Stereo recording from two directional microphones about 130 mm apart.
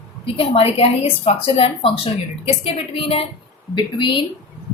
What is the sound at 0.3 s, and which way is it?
A woman's voice, 50° left (ahead or behind).